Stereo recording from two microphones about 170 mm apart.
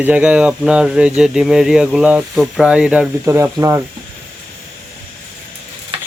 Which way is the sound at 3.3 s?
15° right (ahead or behind).